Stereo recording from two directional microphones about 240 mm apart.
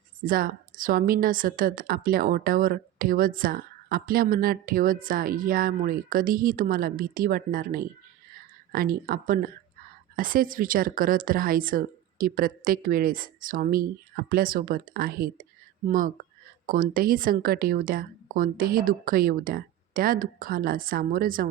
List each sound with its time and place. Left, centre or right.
0.2 s a woman's voice: right